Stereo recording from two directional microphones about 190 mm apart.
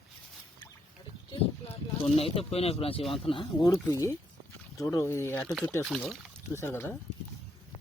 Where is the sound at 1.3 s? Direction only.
30° left (ahead or behind); by 5.5 s 15° left (ahead or behind).